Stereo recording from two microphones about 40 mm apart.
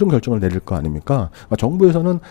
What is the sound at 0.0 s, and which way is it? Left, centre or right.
Speech, centre.